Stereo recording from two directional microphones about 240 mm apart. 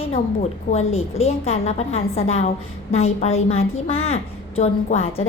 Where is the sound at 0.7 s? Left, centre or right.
Left.